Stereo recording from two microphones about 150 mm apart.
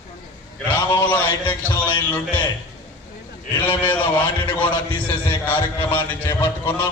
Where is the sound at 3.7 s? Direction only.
10° left (ahead or behind).